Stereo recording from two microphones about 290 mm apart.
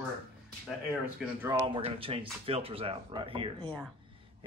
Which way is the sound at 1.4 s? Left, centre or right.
Centre.